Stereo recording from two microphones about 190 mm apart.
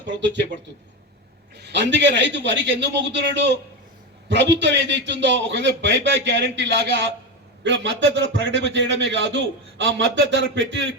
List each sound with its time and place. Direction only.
1.5 s a man's voice: 65° right (ahead or behind)